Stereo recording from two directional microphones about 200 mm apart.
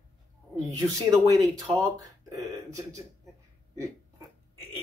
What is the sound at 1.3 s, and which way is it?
Speech, 20° right (ahead or behind).